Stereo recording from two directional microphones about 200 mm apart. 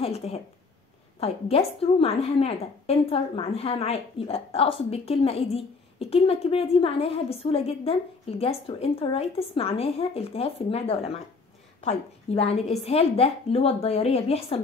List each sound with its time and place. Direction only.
0.0 s a woman's voice: 30° left (ahead or behind)